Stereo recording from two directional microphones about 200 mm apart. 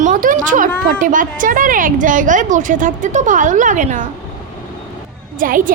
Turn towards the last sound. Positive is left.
turn(degrees=-45)  # may be behind; listen again after turning